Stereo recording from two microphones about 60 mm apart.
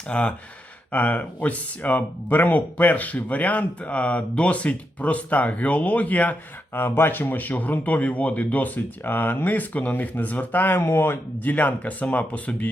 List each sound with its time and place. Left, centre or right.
0.1 s speech: centre
6.7 s speech: left